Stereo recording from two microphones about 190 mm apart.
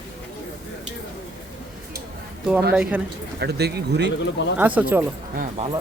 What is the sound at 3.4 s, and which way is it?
Speech, 60° right (ahead or behind).